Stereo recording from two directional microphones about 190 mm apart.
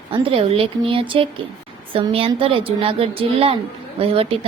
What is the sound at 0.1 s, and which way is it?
A woman's voice, 30° right (ahead or behind).